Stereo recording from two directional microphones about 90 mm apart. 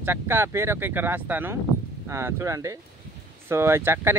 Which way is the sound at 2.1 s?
35° right (ahead or behind).